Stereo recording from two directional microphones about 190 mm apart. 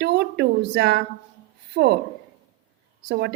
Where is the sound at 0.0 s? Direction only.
60° right (ahead or behind).